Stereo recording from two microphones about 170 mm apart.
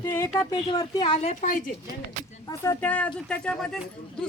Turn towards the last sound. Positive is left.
turn(degrees=5)  # may be behind; listen again after turning